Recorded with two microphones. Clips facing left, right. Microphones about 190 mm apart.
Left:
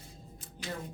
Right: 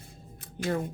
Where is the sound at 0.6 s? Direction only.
55° right (ahead or behind).